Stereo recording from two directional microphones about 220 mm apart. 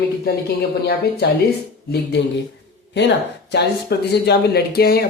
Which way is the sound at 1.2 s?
45° left (ahead or behind).